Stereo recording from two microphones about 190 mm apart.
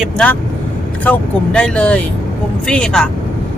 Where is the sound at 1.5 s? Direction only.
5° left (ahead or behind).